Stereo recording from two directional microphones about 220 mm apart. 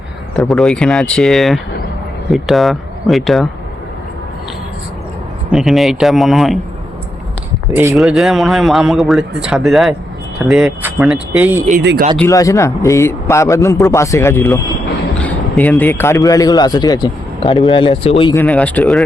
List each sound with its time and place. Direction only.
0.3 s speech: centre (ahead or behind)
5.5 s speech: centre (ahead or behind)
7.7 s speech: 10° right (ahead or behind)
11.8 s speech: 50° right (ahead or behind)
12.1 s a man's voice: 10° left (ahead or behind)
18.4 s speech: 5° left (ahead or behind)